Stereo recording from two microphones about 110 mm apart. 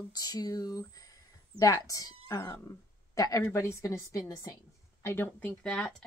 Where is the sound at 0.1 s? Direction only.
35° left (ahead or behind).